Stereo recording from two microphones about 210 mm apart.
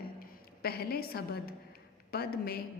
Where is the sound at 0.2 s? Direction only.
45° left (ahead or behind).